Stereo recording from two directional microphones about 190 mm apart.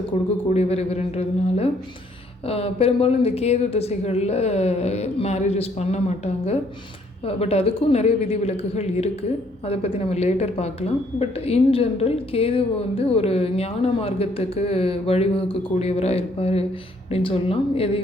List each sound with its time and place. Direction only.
0.5 s a woman's voice: 35° left (ahead or behind)